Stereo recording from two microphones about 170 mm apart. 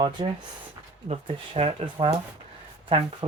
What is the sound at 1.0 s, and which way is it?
Speech, 35° right (ahead or behind).